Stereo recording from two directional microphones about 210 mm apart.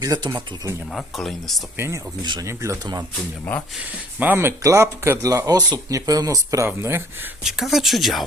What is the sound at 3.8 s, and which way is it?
Speech, 5° right (ahead or behind).